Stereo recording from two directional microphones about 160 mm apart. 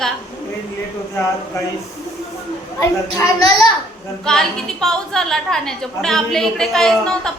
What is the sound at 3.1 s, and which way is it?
Speech, 25° left (ahead or behind).